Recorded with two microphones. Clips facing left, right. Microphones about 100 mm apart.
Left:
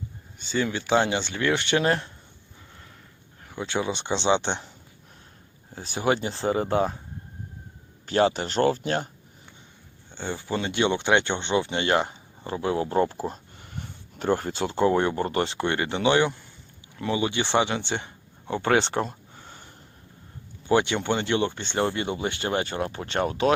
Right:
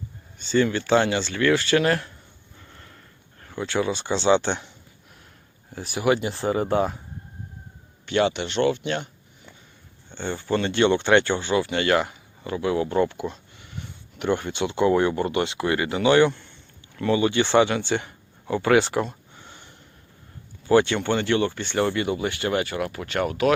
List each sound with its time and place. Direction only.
0.3 s speech: 10° left (ahead or behind)
3.4 s speech: 15° left (ahead or behind)
5.7 s speech: 25° left (ahead or behind)
8.0 s speech: 35° left (ahead or behind)
10.2 s speech: 10° left (ahead or behind); by 19.0 s 30° left (ahead or behind)
19.0 s a sound: 40° left (ahead or behind)
20.7 s speech: 20° left (ahead or behind)